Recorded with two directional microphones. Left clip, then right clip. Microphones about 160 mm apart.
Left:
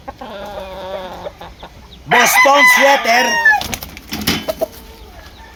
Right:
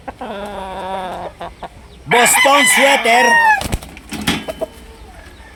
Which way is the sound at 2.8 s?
45° right (ahead or behind).